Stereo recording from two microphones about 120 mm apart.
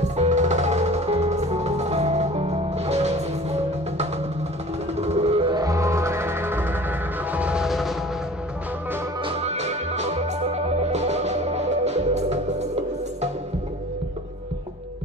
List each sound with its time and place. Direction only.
0.1 s music: 75° right (ahead or behind); by 5.5 s 55° right (ahead or behind)
5.5 s music: 30° right (ahead or behind); by 7.9 s centre (ahead or behind)
9.4 s music: 65° right (ahead or behind)